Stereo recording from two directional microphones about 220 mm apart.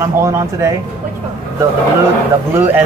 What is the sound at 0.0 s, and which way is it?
Speech, 15° right (ahead or behind).